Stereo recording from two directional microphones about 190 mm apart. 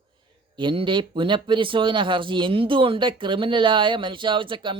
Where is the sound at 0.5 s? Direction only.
25° right (ahead or behind).